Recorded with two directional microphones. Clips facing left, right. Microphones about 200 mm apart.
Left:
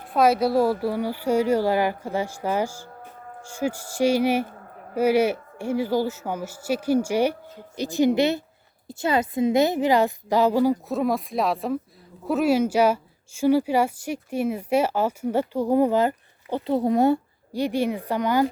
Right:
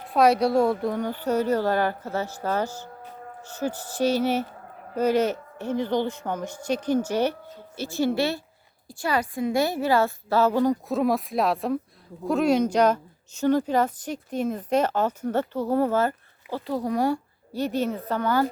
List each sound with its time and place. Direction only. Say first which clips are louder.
0.1 s a woman's voice: even; centre (ahead or behind)